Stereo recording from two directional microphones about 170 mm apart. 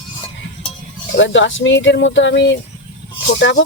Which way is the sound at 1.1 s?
90° left.